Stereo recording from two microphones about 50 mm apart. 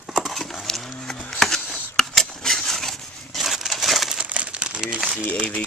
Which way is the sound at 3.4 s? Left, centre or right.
Centre.